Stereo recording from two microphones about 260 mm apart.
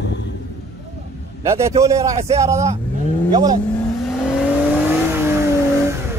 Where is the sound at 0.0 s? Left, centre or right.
Left.